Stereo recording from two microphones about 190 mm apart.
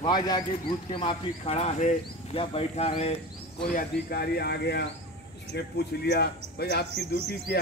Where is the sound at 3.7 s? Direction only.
50° left (ahead or behind).